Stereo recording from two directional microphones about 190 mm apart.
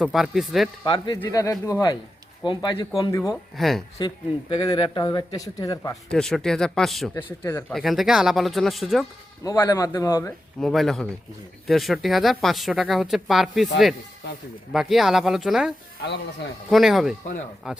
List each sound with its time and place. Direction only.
0.0 s speech: centre (ahead or behind)
0.9 s a man's voice: 25° left (ahead or behind)
3.6 s speech: centre (ahead or behind)
3.9 s a man's voice: 25° left (ahead or behind)
6.1 s speech: 5° left (ahead or behind)
9.4 s a man's voice: 20° left (ahead or behind)
10.6 s speech: centre (ahead or behind)